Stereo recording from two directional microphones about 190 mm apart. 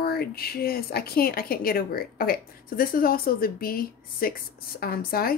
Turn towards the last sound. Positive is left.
turn(degrees=50)  # may be behind; listen again after turning